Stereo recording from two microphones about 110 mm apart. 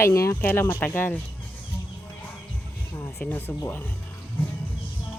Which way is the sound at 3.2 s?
15° left (ahead or behind).